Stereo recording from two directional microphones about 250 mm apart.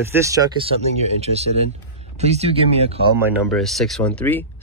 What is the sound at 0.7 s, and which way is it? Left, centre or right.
Speech, right.